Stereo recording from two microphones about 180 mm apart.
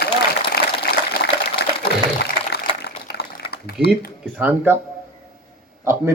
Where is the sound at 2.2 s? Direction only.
65° left (ahead or behind).